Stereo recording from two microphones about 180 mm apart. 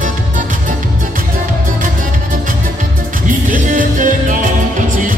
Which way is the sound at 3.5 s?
45° right (ahead or behind).